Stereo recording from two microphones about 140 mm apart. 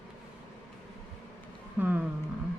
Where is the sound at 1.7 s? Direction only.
10° right (ahead or behind).